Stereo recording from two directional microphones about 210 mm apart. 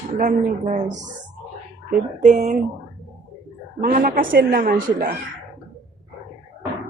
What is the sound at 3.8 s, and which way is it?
A woman's voice, 40° right (ahead or behind).